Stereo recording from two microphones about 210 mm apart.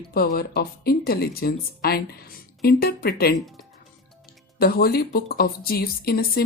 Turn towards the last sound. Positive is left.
turn(degrees=50)  # may be behind; listen again after turning